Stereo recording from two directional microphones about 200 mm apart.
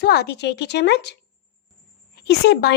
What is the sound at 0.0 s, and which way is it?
A woman's voice, 55° left (ahead or behind).